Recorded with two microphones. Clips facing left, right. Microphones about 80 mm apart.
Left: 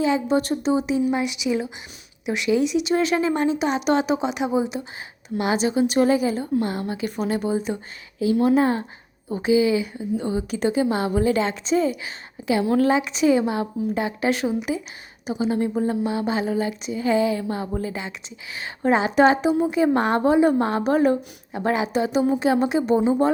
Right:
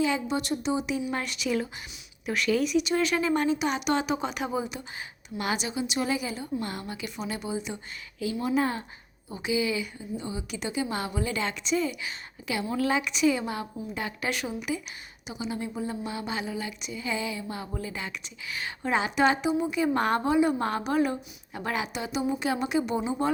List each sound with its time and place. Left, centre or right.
0.0 s a woman's voice: left
1.1 s a woman's voice: centre; by 16.0 s left
16.0 s a woman's voice: left